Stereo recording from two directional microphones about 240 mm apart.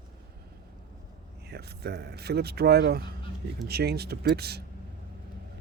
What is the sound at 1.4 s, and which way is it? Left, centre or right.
Speech, right.